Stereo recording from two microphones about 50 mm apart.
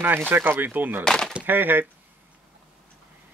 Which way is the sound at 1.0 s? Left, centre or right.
Centre.